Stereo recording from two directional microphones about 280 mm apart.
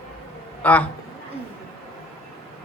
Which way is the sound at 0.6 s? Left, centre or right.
Centre.